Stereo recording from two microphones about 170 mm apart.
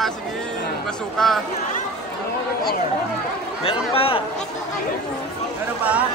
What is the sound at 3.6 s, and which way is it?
Speech, 35° left (ahead or behind).